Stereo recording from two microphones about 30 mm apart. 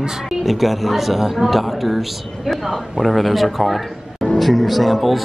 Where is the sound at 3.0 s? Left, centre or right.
Centre.